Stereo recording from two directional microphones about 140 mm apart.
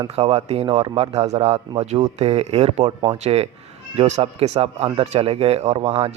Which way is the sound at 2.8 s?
30° right (ahead or behind).